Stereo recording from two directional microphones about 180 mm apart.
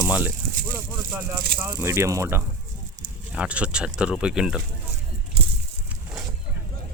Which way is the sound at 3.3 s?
5° right (ahead or behind).